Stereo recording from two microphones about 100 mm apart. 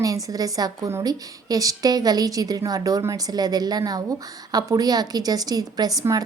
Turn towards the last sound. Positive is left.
turn(degrees=-35)  # may be behind; listen again after turning